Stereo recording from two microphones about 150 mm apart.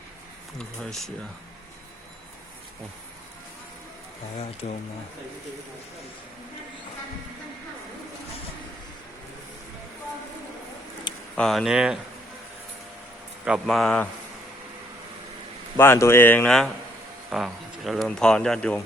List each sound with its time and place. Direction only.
0.6 s speech: centre (ahead or behind)
4.6 s speech: 50° left (ahead or behind)
11.3 s speech: centre (ahead or behind)
13.4 s speech: 5° right (ahead or behind)
15.8 s speech: 15° left (ahead or behind)